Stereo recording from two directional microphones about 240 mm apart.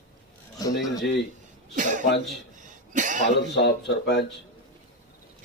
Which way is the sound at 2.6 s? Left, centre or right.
Right.